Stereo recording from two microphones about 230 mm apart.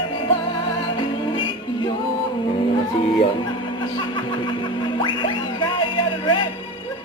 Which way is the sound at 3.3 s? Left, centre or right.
Left.